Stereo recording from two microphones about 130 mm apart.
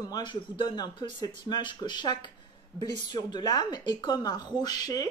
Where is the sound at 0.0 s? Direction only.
35° left (ahead or behind).